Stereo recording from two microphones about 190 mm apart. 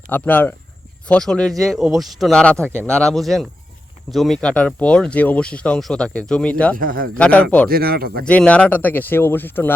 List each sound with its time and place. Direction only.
0.1 s speech: 10° left (ahead or behind)
6.7 s speech: 50° right (ahead or behind)
7.1 s speech: 5° left (ahead or behind)
7.7 s speech: 50° right (ahead or behind)
8.2 s speech: 5° left (ahead or behind)